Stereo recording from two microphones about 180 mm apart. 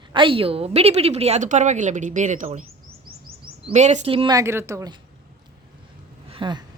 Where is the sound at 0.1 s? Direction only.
30° right (ahead or behind).